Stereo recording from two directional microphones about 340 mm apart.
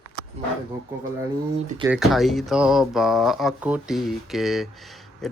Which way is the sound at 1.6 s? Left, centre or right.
Centre.